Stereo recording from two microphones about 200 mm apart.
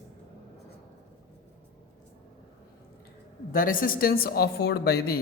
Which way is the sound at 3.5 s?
45° left (ahead or behind).